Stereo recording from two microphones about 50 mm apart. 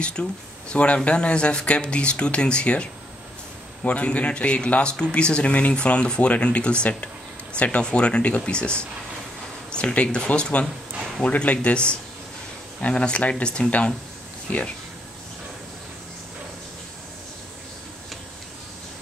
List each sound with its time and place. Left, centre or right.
0.0 s speech: centre
13.7 s speech: left